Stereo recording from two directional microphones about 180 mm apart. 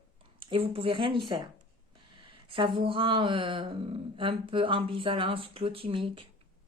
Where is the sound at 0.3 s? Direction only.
30° right (ahead or behind).